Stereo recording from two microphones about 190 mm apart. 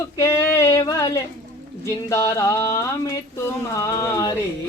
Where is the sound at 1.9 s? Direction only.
15° left (ahead or behind).